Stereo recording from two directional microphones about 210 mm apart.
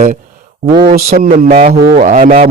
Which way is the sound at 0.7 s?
45° right (ahead or behind).